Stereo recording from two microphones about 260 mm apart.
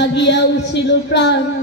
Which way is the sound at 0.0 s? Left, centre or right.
Left.